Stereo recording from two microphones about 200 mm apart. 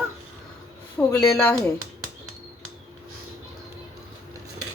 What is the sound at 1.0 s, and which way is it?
Speech, 5° left (ahead or behind).